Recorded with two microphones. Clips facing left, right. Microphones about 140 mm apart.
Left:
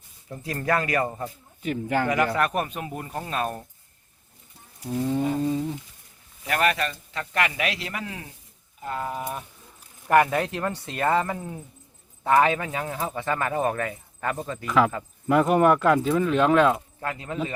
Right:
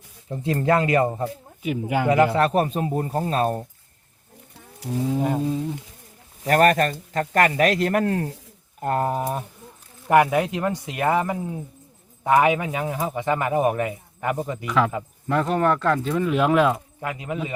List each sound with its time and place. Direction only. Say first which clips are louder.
0.3 s speech: right 5 dB; 25° right (ahead or behind)
1.6 s a man's voice: right 1 dB; 10° right (ahead or behind)
2.0 s speech: right 9 dB; 25° right (ahead or behind)
4.9 s speech: right 1 dB; 5° right (ahead or behind)
6.4 s speech: right 7 dB; 45° right (ahead or behind)
10.1 s a man's voice: right 2 dB; 15° right (ahead or behind)
14.7 s speech: left 1 dB; centre (ahead or behind)
17.0 s a man's voice: right 1 dB; 15° right (ahead or behind)